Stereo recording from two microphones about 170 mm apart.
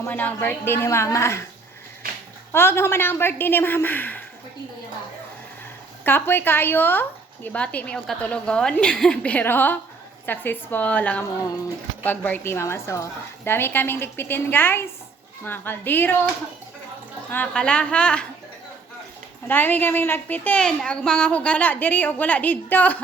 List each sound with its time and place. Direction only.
0.0 s a woman's voice: 10° left (ahead or behind)
2.5 s a woman's voice: 15° left (ahead or behind)
6.1 s a woman's voice: 10° left (ahead or behind)
17.3 s a woman's voice: 10° left (ahead or behind)
19.5 s a woman's voice: 10° left (ahead or behind)